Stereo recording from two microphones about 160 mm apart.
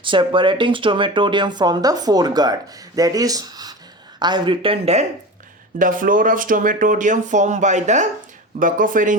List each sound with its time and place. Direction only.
0.0 s speech: 30° right (ahead or behind)
5.8 s speech: 60° right (ahead or behind)